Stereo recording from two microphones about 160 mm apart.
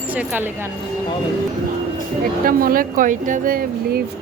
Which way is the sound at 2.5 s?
65° right (ahead or behind).